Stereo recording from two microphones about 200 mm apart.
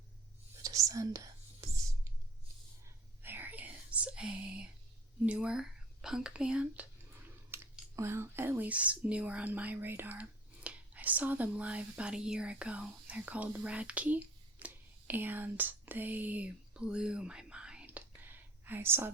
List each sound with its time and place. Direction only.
0.6 s whispering: 15° right (ahead or behind)
3.2 s whispering: 10° right (ahead or behind)
5.2 s speech: 5° right (ahead or behind)